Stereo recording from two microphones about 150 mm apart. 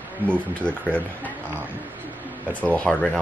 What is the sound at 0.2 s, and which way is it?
Speech, 15° right (ahead or behind).